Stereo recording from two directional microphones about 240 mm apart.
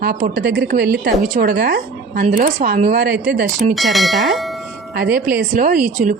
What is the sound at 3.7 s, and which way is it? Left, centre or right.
Speech, centre.